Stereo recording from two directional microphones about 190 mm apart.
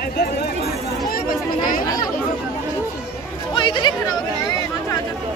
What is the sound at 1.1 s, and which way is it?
Chatter, 50° left (ahead or behind).